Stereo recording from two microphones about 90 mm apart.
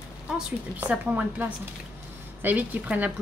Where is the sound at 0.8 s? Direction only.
15° right (ahead or behind).